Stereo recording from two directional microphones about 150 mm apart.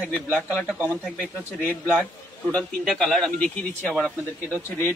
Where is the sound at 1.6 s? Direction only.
15° left (ahead or behind).